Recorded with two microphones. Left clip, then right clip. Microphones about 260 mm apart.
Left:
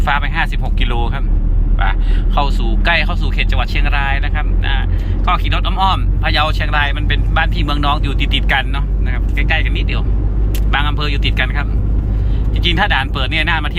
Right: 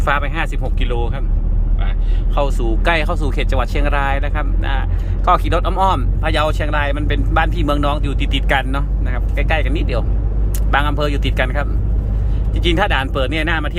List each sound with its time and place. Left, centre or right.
0.0 s speech: centre
2.3 s speech: centre
12.6 s speech: centre